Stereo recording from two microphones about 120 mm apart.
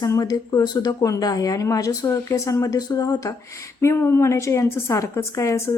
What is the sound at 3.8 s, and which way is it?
A woman's voice, 20° left (ahead or behind).